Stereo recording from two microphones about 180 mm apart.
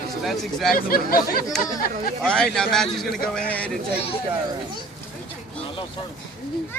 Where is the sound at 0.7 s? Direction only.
55° left (ahead or behind).